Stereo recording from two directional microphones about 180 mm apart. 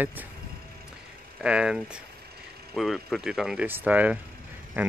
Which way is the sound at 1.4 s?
5° right (ahead or behind).